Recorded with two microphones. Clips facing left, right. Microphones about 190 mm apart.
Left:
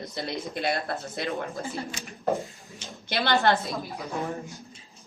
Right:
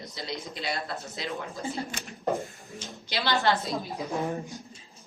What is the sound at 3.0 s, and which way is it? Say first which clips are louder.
Speech: left 3 dB; 55° left (ahead or behind).